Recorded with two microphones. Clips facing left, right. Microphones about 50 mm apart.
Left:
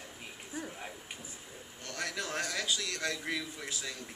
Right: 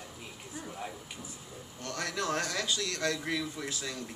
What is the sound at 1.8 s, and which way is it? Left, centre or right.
A man's voice, centre.